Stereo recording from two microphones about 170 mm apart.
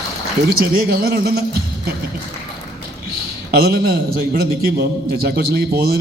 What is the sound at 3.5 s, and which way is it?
A man's voice, 65° right (ahead or behind).